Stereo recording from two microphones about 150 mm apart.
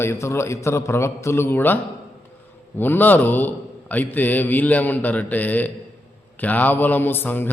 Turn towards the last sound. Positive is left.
turn(degrees=15)  # may be behind; listen again after turning